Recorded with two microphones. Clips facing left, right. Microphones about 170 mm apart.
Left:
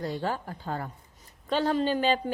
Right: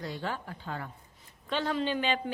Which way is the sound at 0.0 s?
40° left (ahead or behind).